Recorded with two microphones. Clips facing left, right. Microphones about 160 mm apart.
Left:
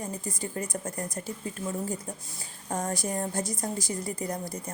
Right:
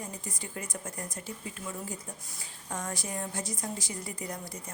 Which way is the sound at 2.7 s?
40° left (ahead or behind).